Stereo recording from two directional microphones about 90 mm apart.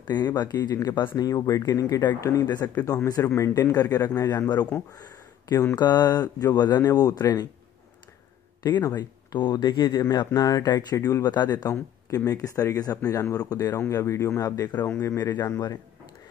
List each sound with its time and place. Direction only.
0.0 s speech: 50° left (ahead or behind); by 2.4 s 30° left (ahead or behind)
2.4 s speech: 45° left (ahead or behind); by 3.7 s 30° left (ahead or behind)
3.7 s speech: 45° left (ahead or behind)
4.9 s a sound: 45° left (ahead or behind)
5.8 s speech: 50° left (ahead or behind)
8.8 s speech: 50° left (ahead or behind)
10.1 s speech: 40° left (ahead or behind)
12.3 s speech: 40° left (ahead or behind)
13.7 s speech: 35° left (ahead or behind)